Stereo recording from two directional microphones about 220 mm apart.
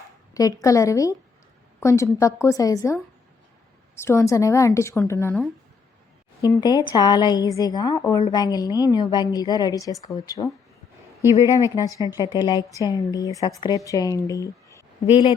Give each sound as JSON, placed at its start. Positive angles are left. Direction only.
{"t": 0.3, "sound": "a woman's voice", "side_deg": 15}